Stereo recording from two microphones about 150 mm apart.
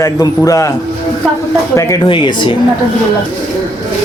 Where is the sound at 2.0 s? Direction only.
30° left (ahead or behind).